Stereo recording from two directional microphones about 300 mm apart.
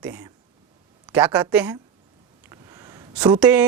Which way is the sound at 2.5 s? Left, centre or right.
Centre.